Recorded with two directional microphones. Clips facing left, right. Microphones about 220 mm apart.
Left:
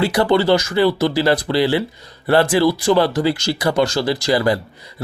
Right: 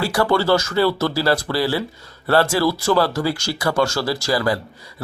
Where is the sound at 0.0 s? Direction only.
20° left (ahead or behind).